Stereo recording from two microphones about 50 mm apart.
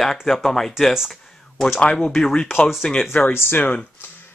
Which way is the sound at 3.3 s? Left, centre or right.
Left.